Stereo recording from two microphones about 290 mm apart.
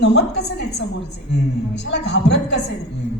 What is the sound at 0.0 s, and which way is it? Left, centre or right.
Speech, left.